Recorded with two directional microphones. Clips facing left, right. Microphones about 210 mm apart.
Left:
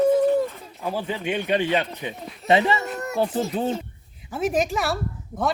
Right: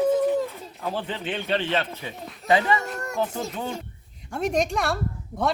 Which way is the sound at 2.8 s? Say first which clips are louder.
Left 3 dB; 5° left (ahead or behind).